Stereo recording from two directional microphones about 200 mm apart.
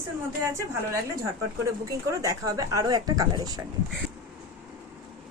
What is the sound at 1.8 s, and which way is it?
Speech, 15° right (ahead or behind).